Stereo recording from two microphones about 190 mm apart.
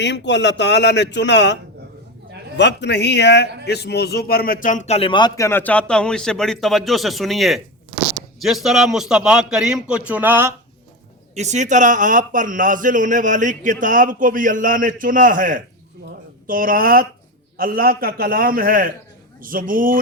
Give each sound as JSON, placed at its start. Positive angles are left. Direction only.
{"t": 0.0, "sound": "a man's voice", "side_deg": 65}
{"t": 2.6, "sound": "a man's voice", "side_deg": 65}
{"t": 5.5, "sound": "a man's voice", "side_deg": 10}
{"t": 11.3, "sound": "a man's voice", "side_deg": -35}